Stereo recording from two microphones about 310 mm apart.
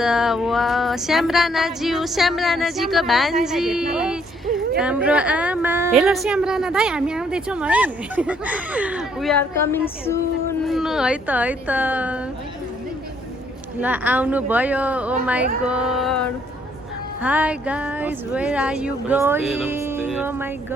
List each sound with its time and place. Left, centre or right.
0.0 s a woman's voice: centre
10.7 s a woman's voice: centre
13.8 s a woman's voice: centre